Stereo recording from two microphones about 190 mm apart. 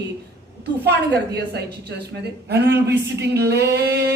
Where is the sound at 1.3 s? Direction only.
60° right (ahead or behind).